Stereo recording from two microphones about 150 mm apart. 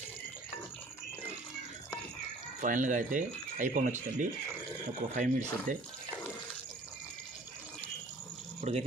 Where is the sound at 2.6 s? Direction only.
60° right (ahead or behind).